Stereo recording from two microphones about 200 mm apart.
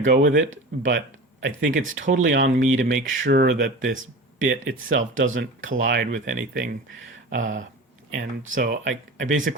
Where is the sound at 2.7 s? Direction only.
70° right (ahead or behind).